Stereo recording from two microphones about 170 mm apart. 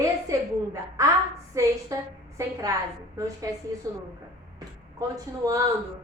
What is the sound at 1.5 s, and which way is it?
A woman's voice, 20° right (ahead or behind).